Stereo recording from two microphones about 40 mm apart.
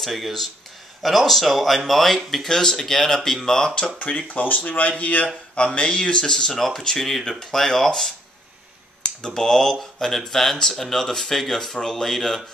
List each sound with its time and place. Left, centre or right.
0.0 s speech: centre
4.3 s speech: left
5.6 s speech: left